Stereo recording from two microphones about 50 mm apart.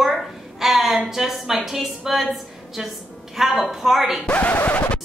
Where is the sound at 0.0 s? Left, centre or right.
Centre.